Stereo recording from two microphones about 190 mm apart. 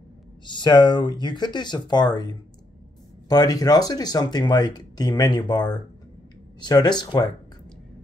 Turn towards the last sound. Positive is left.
turn(degrees=20)  # may be behind; listen again after turning